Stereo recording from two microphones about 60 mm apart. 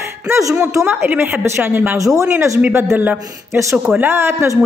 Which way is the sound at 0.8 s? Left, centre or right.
Right.